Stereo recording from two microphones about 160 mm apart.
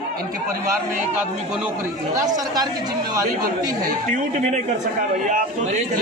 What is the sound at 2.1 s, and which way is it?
Speech, 25° right (ahead or behind).